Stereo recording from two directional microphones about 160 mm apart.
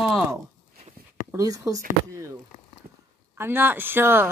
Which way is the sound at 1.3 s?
20° right (ahead or behind).